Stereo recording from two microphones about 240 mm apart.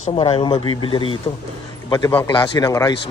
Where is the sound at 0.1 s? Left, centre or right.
Left.